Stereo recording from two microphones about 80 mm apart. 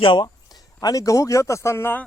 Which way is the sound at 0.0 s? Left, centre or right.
Left.